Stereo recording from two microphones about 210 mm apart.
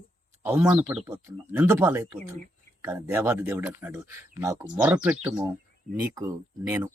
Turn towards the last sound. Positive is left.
turn(degrees=-10)  # may be behind; listen again after turning